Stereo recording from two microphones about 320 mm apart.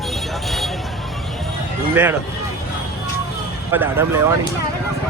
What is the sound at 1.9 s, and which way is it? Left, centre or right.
Speech, centre.